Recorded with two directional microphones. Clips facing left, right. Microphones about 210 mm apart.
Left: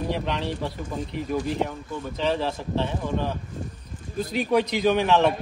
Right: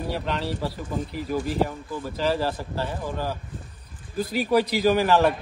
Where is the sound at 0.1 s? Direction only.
Centre (ahead or behind).